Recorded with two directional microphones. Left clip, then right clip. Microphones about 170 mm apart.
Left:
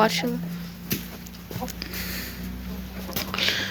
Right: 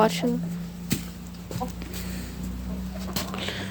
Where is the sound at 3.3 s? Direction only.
15° right (ahead or behind).